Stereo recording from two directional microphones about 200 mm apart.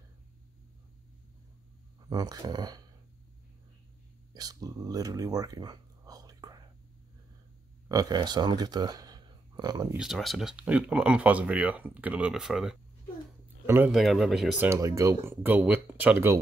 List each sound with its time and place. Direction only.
2.0 s speech: 20° right (ahead or behind)
4.4 s speech: 20° right (ahead or behind)
7.9 s speech: 20° right (ahead or behind)
9.9 s speech: centre (ahead or behind)
13.9 s speech: centre (ahead or behind)
14.7 s speech: 15° right (ahead or behind)